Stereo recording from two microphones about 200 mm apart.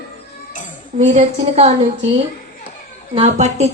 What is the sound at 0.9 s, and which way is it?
Speech, 35° right (ahead or behind).